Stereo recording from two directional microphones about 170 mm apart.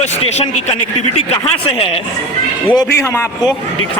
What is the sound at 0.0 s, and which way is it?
Speech, 40° left (ahead or behind).